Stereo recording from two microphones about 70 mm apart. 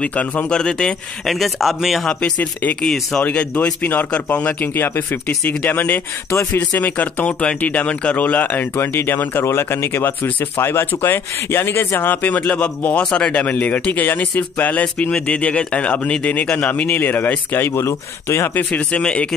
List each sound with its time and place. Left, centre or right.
0.0 s speech: left
1.2 s speech: centre
2.0 s speech: centre
3.3 s speech: centre
4.7 s speech: left
8.7 s speech: left
18.5 s speech: left